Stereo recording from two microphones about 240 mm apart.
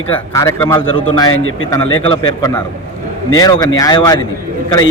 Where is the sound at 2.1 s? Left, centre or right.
Centre.